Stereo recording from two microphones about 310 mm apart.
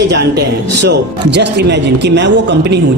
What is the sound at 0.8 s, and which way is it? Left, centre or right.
A man's voice, right.